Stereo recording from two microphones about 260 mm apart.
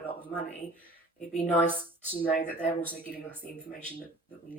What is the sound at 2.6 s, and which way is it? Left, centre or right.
Speech, centre.